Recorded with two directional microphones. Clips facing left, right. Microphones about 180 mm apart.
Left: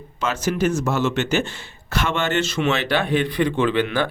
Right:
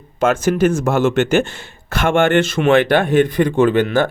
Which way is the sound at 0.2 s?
50° right (ahead or behind).